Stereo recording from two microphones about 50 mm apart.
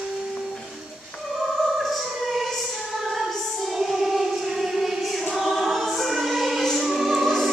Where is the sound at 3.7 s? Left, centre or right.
Centre.